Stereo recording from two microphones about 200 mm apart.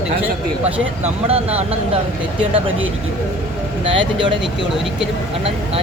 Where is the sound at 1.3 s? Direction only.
30° right (ahead or behind).